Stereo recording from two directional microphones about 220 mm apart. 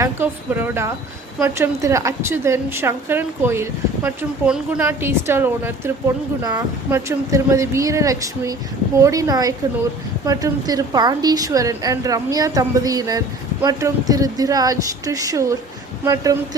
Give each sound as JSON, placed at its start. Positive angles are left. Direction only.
{"t": 0.0, "sound": "a woman's voice", "side_deg": -10}